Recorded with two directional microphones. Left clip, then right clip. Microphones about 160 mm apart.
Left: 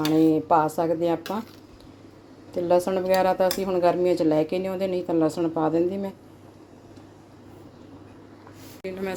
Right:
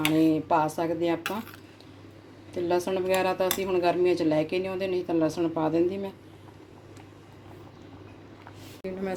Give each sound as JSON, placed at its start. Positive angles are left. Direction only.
{"t": 0.1, "sound": "speech", "side_deg": 15}
{"t": 2.6, "sound": "speech", "side_deg": 20}
{"t": 8.8, "sound": "a sound", "side_deg": 0}